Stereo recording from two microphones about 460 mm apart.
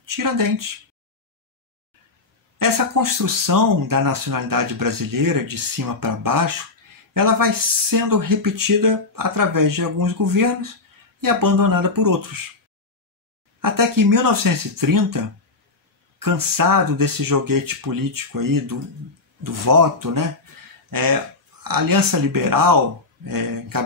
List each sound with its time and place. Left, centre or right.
0.0 s speech: right
2.6 s speech: right
13.6 s speech: right